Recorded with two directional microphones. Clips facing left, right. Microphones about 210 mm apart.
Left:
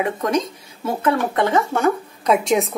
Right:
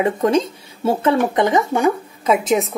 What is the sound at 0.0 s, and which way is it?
Speech, 30° right (ahead or behind).